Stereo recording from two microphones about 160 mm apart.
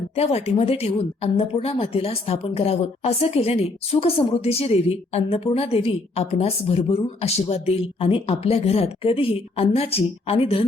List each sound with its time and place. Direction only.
0.2 s a woman's voice: 40° left (ahead or behind)